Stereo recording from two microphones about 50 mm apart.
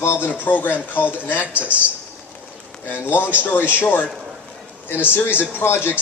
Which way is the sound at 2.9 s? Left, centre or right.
Left.